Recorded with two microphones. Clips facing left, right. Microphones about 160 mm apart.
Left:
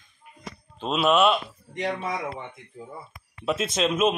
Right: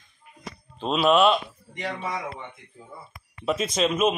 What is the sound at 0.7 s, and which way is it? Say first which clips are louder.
Speech: right 1 dB; centre (ahead or behind).